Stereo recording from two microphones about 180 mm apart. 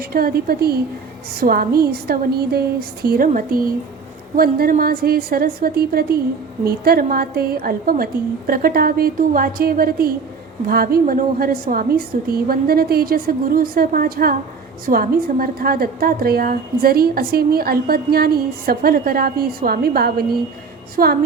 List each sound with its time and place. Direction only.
0.0 s a woman's voice: 55° right (ahead or behind)